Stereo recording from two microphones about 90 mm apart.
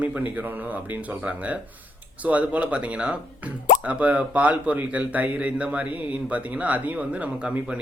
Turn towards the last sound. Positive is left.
turn(degrees=-15)  # may be behind; listen again after turning